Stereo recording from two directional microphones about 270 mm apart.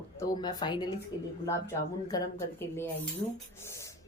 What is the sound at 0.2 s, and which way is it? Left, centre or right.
Speech, centre.